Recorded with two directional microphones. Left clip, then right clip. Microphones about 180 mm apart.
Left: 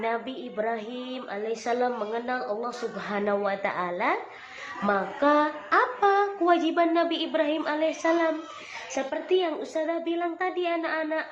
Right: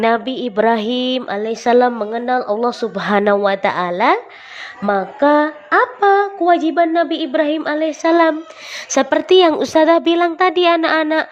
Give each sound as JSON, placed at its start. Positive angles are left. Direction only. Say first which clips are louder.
{"t": 0.0, "sound": "a woman's voice", "louder": "right 14 dB", "side_deg": -60}
{"t": 2.1, "sound": "a sound", "louder": "right 12 dB", "side_deg": -55}
{"t": 9.0, "sound": "a woman's voice", "louder": "right 15 dB", "side_deg": -65}